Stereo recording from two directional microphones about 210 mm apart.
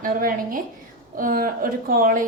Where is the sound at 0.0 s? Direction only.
40° right (ahead or behind).